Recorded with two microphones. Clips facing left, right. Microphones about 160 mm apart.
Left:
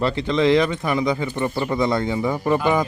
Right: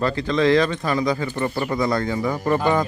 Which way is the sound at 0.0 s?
20° left (ahead or behind).